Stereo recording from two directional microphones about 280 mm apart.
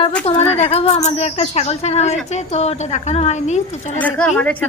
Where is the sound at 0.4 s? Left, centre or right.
Left.